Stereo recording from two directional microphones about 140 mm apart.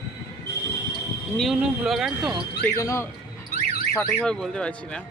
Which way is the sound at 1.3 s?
Centre (ahead or behind).